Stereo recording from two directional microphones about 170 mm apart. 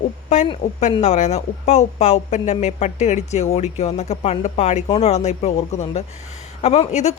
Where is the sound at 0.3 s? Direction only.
45° left (ahead or behind).